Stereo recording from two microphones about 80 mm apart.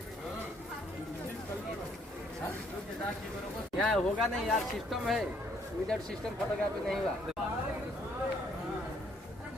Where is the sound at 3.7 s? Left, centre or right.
Centre.